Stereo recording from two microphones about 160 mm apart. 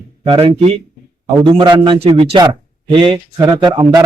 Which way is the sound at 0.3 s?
35° right (ahead or behind).